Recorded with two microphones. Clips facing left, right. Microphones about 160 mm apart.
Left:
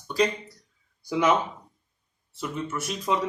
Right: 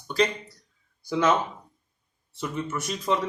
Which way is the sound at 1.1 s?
15° left (ahead or behind).